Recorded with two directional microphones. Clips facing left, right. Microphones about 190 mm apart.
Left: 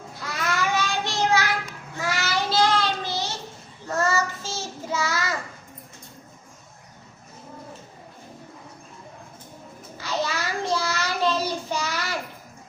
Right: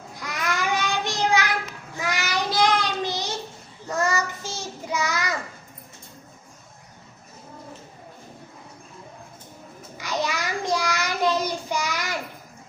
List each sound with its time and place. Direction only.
0.2 s child singing: 15° right (ahead or behind)
10.0 s child singing: 15° right (ahead or behind)